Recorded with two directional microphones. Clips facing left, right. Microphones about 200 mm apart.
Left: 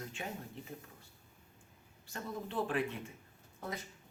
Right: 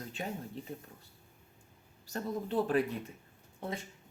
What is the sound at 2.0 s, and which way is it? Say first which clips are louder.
Speech: right 6 dB; 40° right (ahead or behind).